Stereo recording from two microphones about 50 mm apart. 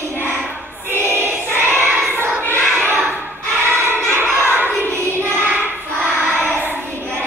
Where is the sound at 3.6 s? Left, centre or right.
Right.